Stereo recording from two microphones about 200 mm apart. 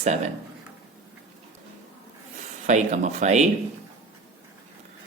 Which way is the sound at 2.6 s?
35° right (ahead or behind).